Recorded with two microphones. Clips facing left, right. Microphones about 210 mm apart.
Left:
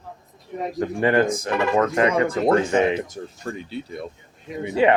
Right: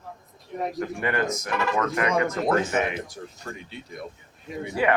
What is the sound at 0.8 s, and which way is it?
Speech, 30° left (ahead or behind).